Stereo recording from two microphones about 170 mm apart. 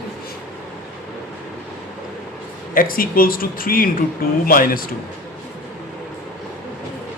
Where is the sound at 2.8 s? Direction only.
55° left (ahead or behind).